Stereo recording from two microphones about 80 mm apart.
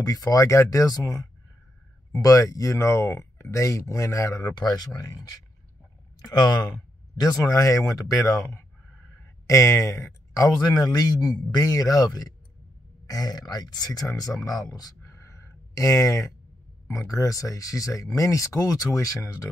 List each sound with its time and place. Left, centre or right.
0.0 s speech: left
4.6 s speech: left
7.3 s speech: left
9.2 s a sound: left
10.6 s speech: left
15.0 s a sound: left
17.1 s speech: left